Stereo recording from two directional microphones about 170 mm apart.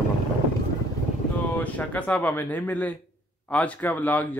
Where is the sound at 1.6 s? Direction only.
10° left (ahead or behind).